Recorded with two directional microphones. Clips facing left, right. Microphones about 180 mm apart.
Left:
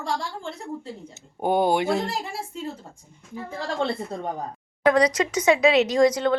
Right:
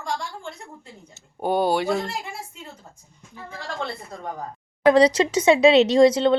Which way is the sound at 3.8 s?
30° left (ahead or behind).